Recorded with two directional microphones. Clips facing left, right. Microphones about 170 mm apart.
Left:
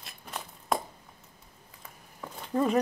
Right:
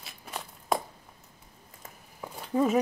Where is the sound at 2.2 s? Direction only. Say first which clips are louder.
Right 2 dB; 5° right (ahead or behind).